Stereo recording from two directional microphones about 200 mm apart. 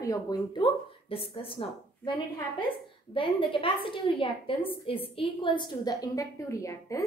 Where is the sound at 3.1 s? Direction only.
25° left (ahead or behind).